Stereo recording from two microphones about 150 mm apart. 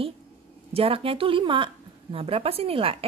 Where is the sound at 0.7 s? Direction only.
40° right (ahead or behind).